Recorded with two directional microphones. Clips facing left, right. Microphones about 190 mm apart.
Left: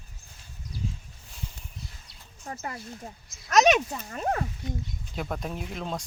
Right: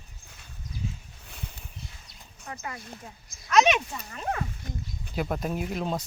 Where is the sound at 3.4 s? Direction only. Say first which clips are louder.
Left 1 dB; 40° left (ahead or behind).